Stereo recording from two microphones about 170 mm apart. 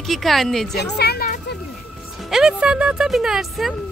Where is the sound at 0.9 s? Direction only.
70° left (ahead or behind).